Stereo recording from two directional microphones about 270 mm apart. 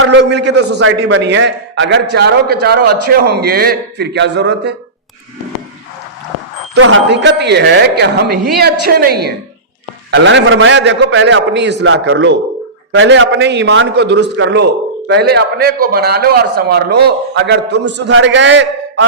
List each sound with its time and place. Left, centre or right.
0.0 s a man's voice: right
6.7 s a man's voice: right